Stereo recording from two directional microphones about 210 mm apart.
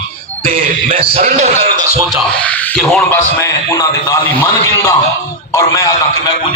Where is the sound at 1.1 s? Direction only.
30° right (ahead or behind).